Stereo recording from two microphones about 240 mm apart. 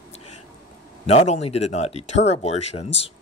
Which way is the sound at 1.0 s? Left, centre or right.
Left.